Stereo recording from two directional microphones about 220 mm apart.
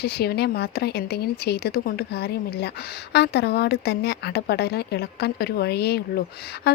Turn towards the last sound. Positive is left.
turn(degrees=45)  # may be behind; listen again after turning